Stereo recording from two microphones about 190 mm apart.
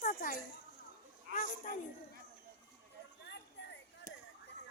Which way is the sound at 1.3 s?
50° right (ahead or behind).